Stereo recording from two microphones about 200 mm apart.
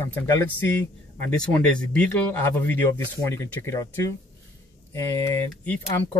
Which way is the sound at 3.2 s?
15° left (ahead or behind).